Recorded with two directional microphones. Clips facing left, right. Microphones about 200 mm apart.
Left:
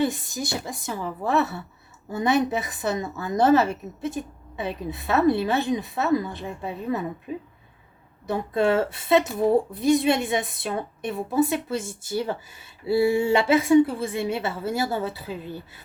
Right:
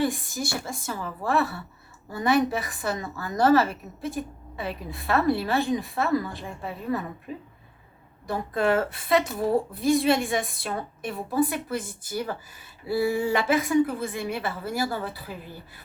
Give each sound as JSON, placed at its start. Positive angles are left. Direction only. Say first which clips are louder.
{"t": 0.0, "sound": "a woman's voice", "louder": "left 1 dB", "side_deg": 20}
{"t": 8.3, "sound": "a woman's voice", "louder": "left 2 dB", "side_deg": 25}